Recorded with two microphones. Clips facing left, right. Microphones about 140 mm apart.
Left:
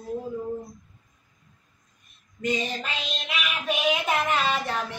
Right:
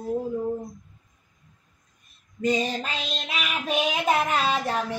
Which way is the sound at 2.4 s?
35° right (ahead or behind).